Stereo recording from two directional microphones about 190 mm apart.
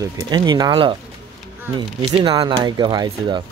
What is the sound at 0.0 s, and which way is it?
Speech, 20° right (ahead or behind).